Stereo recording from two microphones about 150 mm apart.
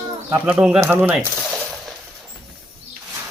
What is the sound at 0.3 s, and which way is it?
Speech, 15° right (ahead or behind).